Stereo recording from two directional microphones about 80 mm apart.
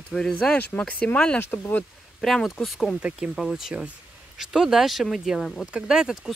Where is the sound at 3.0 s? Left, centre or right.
Centre.